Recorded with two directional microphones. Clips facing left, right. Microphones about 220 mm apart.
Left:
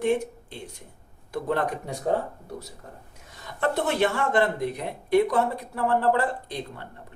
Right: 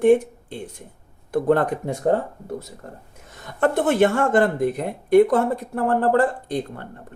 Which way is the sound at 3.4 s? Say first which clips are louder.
Right 6 dB; 50° right (ahead or behind).